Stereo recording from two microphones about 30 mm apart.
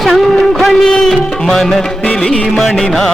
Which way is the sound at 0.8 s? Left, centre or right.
Left.